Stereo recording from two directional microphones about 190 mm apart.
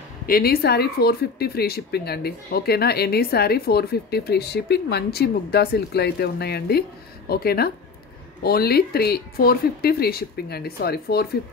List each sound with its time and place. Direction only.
0.3 s speech: 55° left (ahead or behind)